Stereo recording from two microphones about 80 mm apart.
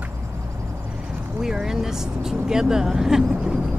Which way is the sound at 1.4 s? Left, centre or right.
Centre.